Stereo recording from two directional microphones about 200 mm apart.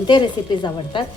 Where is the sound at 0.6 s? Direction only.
25° left (ahead or behind).